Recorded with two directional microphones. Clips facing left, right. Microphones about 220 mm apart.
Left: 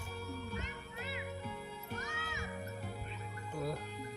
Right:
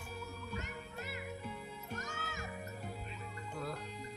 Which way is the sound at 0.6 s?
45° right (ahead or behind).